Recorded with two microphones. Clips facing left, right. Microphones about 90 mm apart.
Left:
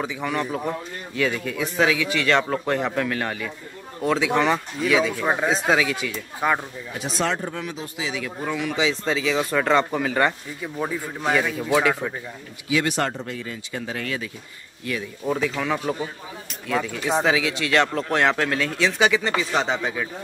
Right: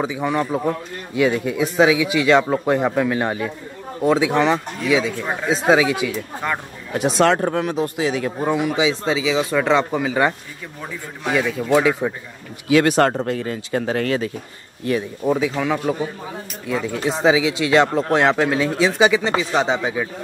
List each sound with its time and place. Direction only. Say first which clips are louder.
0.0 s a man's voice: right 5 dB; 20° right (ahead or behind)
4.3 s speech: right 3 dB; centre (ahead or behind)
4.8 s a man's voice: right 1 dB; 15° right (ahead or behind)
5.2 s speech: left 3 dB; 20° left (ahead or behind)
5.5 s a man's voice: right 5 dB; 15° right (ahead or behind)
6.4 s a man's voice: left 3 dB; 10° left (ahead or behind)
6.9 s speech: right 9 dB; 65° right (ahead or behind); by 8.3 s 50° right (ahead or behind)
8.5 s a man's voice: right 4 dB; 10° right (ahead or behind)
10.8 s a man's voice: left 4 dB; 15° left (ahead or behind)
11.6 s a man's voice: right 5 dB; 5° right (ahead or behind)
12.6 s speech: right 8 dB; 55° right (ahead or behind)
15.2 s a man's voice: right 4 dB; 10° right (ahead or behind)
16.6 s a man's voice: right 2 dB; 15° right (ahead or behind)